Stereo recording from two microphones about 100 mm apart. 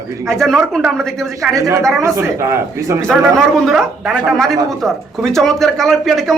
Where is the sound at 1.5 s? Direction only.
35° right (ahead or behind).